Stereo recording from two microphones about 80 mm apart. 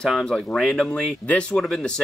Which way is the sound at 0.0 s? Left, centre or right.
Centre.